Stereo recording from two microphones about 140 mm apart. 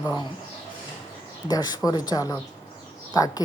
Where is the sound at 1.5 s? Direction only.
30° left (ahead or behind).